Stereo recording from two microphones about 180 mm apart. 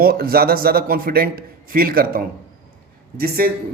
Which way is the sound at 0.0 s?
55° right (ahead or behind).